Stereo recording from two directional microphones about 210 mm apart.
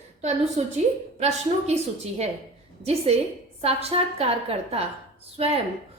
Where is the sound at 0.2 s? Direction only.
35° right (ahead or behind).